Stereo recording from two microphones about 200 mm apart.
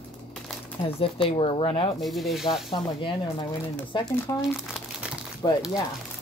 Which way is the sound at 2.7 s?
20° left (ahead or behind).